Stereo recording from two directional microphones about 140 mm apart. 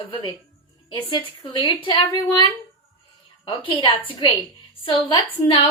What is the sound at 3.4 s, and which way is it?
A woman's voice, 35° left (ahead or behind).